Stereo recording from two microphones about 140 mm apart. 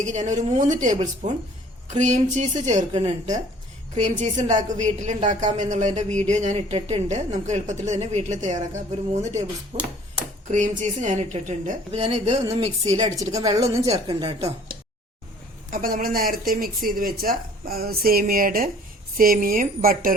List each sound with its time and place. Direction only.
0.0 s a woman's voice: 60° right (ahead or behind)
9.7 s a woman's voice: 45° right (ahead or behind)
10.5 s a woman's voice: 60° right (ahead or behind)
12.8 s a woman's voice: 25° right (ahead or behind)
13.8 s a woman's voice: 45° right (ahead or behind)
15.7 s speech: 80° right